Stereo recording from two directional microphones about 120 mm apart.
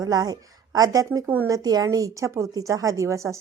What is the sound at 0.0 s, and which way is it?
A woman's voice, 35° right (ahead or behind).